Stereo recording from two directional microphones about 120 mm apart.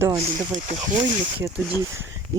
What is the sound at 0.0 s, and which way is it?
Speech, 30° right (ahead or behind).